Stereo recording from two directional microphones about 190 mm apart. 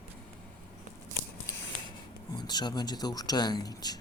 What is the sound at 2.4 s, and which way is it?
Speech, 20° left (ahead or behind).